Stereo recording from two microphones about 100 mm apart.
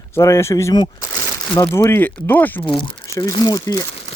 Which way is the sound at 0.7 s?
45° left (ahead or behind).